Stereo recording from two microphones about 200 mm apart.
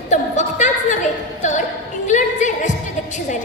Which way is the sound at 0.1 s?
35° left (ahead or behind).